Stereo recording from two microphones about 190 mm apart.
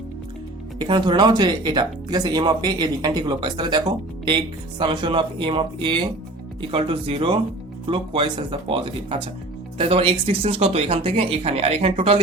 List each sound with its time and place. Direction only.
0.8 s speech: 25° right (ahead or behind)